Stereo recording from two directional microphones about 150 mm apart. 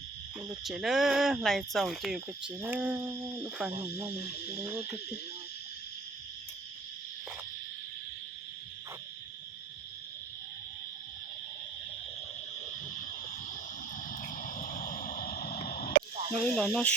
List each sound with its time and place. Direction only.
0.6 s speech: centre (ahead or behind)
2.6 s owl: 10° right (ahead or behind)
3.3 s speech: 5° right (ahead or behind)
3.8 s owl: 15° right (ahead or behind)
14.1 s vehicle: 60° left (ahead or behind); by 15.9 s 85° left
16.3 s speech: 5° left (ahead or behind)